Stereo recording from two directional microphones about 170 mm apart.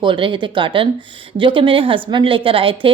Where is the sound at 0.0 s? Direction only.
30° right (ahead or behind).